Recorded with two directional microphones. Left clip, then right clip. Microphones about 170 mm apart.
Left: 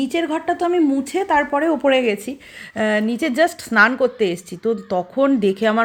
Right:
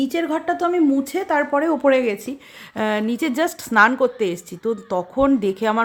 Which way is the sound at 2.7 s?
10° right (ahead or behind).